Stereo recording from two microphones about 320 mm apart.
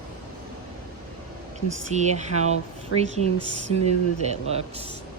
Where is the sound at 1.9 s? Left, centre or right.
Right.